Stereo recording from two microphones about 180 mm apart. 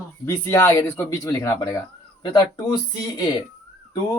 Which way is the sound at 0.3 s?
15° left (ahead or behind).